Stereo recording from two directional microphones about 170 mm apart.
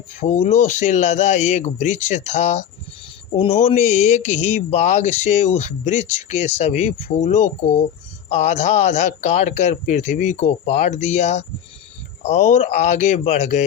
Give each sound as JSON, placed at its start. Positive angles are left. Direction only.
{"t": 0.2, "sound": "speech", "side_deg": 45}